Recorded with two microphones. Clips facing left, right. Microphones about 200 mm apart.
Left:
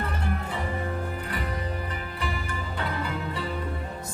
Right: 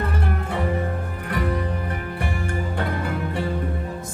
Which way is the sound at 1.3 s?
55° right (ahead or behind).